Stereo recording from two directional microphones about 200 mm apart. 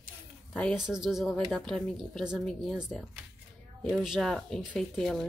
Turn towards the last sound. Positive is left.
turn(degrees=0)  # may be behind; listen again after turning